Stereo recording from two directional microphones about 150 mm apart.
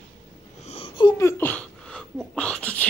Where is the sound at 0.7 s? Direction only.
40° left (ahead or behind).